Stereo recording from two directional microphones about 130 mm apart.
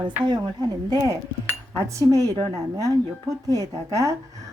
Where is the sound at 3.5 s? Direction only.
25° right (ahead or behind).